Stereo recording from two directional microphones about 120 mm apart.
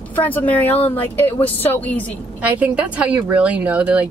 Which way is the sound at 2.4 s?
10° right (ahead or behind).